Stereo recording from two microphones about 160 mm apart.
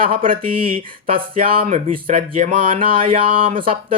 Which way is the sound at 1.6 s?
55° right (ahead or behind).